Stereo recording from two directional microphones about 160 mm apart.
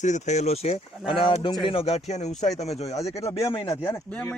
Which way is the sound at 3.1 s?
20° left (ahead or behind).